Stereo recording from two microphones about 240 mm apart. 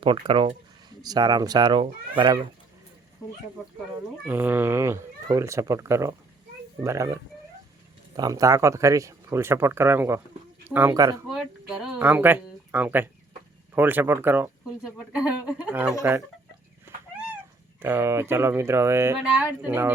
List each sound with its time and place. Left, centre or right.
0.0 s speech: right
4.3 s speech: centre
11.3 s speech: centre
17.7 s speech: centre